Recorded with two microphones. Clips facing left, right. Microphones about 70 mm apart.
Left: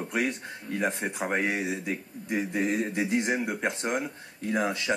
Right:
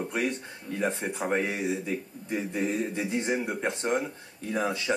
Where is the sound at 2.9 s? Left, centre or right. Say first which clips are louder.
Left 2 dB; centre.